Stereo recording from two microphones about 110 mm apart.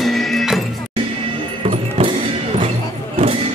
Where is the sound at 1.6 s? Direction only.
60° right (ahead or behind).